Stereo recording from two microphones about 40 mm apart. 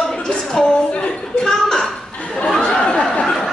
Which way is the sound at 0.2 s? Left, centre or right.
Centre.